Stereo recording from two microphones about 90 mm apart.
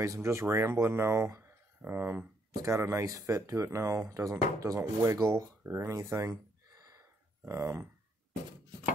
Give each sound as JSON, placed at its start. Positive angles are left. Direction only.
{"t": 0.0, "sound": "speech", "side_deg": -35}